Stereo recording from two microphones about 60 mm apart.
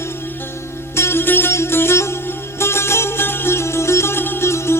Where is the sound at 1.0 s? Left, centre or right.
Left.